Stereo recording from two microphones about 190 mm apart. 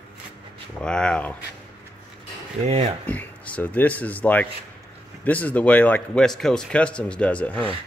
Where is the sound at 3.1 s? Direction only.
10° left (ahead or behind).